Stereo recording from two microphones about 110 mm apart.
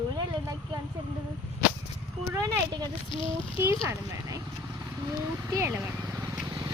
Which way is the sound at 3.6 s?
25° right (ahead or behind).